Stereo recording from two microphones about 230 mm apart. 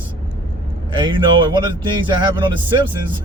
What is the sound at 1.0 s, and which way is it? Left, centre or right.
Speech, centre.